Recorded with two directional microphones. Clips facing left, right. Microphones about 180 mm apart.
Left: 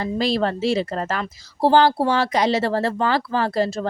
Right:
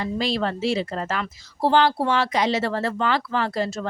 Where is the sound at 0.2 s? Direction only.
40° left (ahead or behind).